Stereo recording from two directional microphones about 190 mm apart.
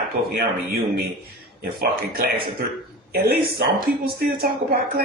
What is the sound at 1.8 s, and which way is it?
Speech, 55° right (ahead or behind).